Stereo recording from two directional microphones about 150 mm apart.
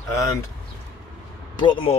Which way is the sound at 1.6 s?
35° left (ahead or behind).